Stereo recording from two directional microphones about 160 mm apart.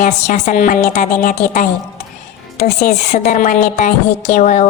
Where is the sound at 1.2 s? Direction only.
60° left (ahead or behind).